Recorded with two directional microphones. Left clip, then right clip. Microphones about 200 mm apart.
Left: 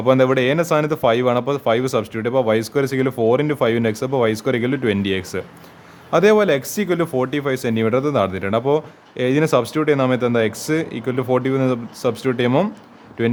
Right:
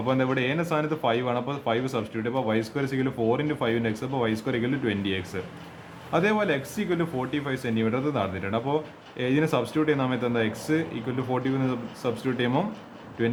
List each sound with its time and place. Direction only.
0.0 s speech: 55° left (ahead or behind)